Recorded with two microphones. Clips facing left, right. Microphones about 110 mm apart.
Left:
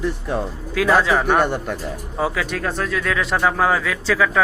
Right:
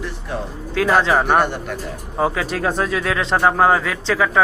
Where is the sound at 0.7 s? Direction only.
30° right (ahead or behind).